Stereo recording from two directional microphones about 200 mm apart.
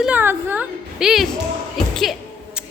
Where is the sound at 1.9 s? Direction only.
Centre (ahead or behind).